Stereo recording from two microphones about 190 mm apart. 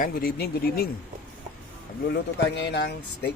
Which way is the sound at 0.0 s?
50° left (ahead or behind).